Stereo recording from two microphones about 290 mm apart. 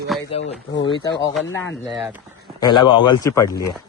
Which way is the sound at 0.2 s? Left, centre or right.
Left.